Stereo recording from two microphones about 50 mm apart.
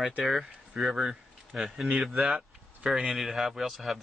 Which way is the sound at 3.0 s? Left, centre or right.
Centre.